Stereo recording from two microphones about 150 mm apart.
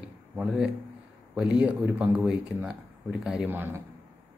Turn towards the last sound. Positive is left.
turn(degrees=-10)  # may be behind; listen again after turning